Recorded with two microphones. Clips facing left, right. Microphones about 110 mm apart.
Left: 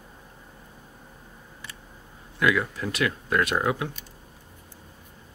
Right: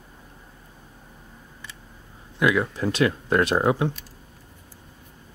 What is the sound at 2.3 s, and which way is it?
Speech, 20° right (ahead or behind).